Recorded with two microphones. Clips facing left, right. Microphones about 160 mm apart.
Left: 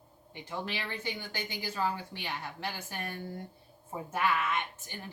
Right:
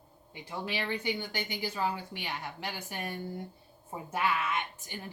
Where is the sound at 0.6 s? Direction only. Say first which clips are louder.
Right 5 dB; 15° right (ahead or behind).